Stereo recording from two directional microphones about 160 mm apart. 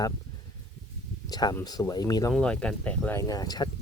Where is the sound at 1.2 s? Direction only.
25° left (ahead or behind).